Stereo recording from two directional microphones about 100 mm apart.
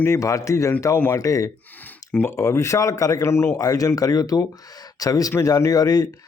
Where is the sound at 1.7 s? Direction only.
15° left (ahead or behind).